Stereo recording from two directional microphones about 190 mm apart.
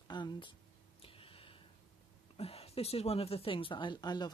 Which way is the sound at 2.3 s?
30° left (ahead or behind).